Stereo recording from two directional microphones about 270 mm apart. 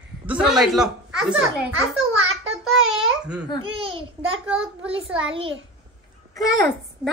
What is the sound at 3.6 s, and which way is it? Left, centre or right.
Speech, centre.